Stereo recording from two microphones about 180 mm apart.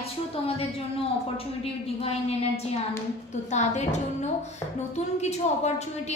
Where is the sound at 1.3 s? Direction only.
30° left (ahead or behind).